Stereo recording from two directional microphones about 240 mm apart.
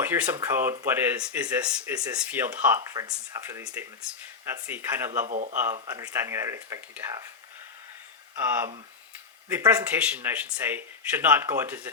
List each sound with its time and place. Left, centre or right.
0.0 s speech: centre
5.2 s speech: right
5.9 s speech: centre
8.4 s speech: centre